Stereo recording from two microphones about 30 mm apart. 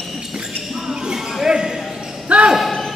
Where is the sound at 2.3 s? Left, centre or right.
Right.